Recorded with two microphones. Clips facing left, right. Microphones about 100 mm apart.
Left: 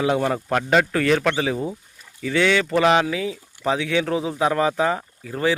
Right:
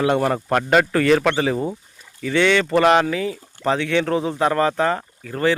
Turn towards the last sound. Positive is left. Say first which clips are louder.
# right 2 dB
turn(degrees=5)  # may be behind; listen again after turning